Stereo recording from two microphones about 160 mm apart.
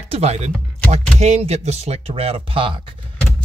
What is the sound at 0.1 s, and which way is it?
Speech, 40° right (ahead or behind).